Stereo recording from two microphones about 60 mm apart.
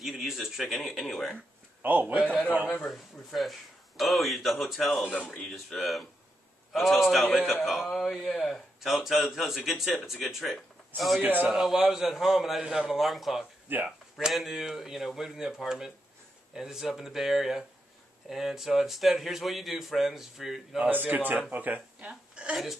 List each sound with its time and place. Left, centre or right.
0.0 s a man's voice: centre
1.8 s a man's voice: right
2.9 s a man's voice: centre
11.1 s a man's voice: right
11.5 s a man's voice: centre
20.9 s a man's voice: right
22.3 s a woman's voice: centre